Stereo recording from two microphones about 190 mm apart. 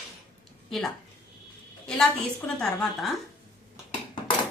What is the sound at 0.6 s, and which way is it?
A woman's voice, centre (ahead or behind).